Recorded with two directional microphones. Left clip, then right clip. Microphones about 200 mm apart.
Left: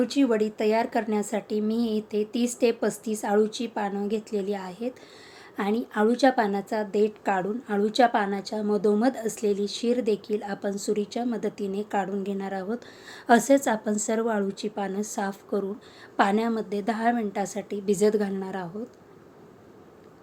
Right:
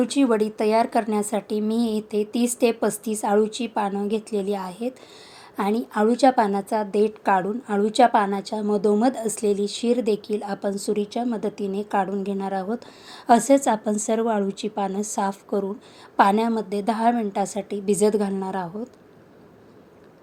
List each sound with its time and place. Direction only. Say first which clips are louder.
0.0 s a woman's voice: right 3 dB; 15° right (ahead or behind)